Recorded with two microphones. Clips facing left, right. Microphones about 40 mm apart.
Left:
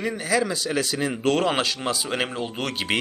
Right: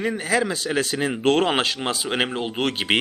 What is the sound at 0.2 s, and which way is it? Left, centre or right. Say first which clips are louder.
Speech: right 1 dB; right.